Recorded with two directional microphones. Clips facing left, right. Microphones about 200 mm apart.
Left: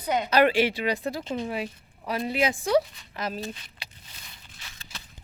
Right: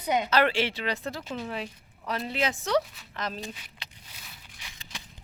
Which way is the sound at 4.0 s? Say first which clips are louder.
Even; 10° right (ahead or behind).